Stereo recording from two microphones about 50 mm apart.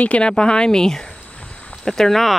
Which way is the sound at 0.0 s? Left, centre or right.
Left.